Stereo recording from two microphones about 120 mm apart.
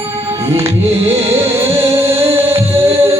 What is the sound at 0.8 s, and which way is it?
Music, 20° right (ahead or behind).